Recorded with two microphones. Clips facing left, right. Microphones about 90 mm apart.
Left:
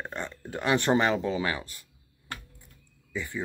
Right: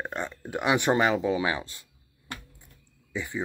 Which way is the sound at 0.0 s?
20° right (ahead or behind).